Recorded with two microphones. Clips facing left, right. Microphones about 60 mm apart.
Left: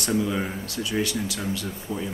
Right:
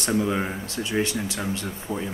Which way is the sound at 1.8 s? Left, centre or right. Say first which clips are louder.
Right 2 dB; centre.